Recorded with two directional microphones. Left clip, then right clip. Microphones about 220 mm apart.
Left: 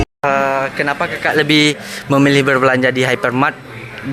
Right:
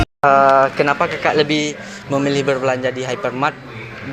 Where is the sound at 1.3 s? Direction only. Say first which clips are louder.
Left 4 dB; 40° left (ahead or behind).